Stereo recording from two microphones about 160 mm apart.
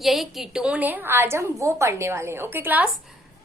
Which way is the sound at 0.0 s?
Centre (ahead or behind).